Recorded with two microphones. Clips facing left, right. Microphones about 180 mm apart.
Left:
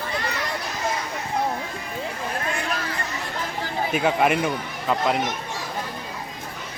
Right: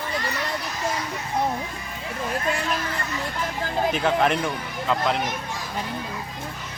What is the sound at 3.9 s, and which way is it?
Speech, 10° left (ahead or behind).